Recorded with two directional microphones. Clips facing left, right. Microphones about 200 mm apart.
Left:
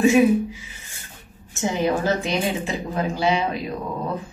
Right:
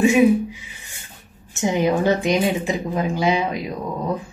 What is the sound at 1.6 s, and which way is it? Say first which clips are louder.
A woman's voice: right 3 dB; 15° right (ahead or behind).